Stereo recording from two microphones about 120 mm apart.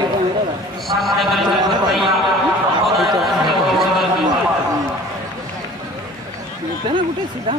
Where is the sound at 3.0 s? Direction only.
Centre (ahead or behind).